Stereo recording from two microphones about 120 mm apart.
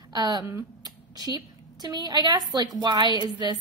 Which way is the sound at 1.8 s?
35° right (ahead or behind).